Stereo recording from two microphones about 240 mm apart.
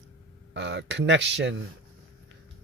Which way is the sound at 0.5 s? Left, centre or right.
Right.